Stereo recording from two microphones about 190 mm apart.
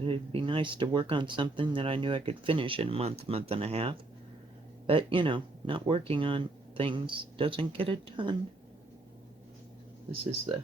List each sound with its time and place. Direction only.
0.0 s speech: 30° right (ahead or behind)